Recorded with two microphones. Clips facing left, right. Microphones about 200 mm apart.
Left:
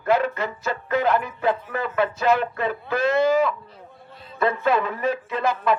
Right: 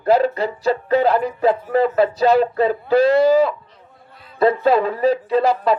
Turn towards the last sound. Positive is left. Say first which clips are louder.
# right 6 dB
turn(degrees=-35)  # may be behind; listen again after turning